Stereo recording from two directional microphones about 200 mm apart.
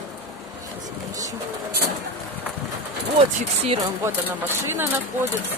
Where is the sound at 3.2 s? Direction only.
25° right (ahead or behind).